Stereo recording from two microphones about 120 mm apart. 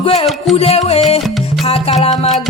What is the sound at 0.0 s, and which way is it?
Music, 50° left (ahead or behind).